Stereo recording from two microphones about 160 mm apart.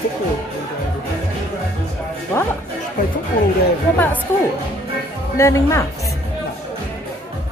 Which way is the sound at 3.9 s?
10° left (ahead or behind).